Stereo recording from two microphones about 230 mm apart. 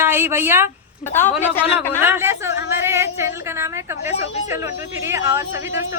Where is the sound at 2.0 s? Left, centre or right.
Centre.